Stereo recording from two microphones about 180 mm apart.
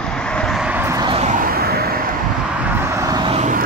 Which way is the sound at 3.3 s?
40° right (ahead or behind).